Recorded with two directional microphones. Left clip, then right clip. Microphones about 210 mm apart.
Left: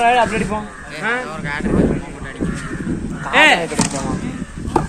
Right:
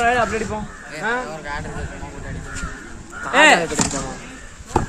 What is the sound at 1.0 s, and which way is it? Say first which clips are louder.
Speech: left 2 dB; 40° right (ahead or behind).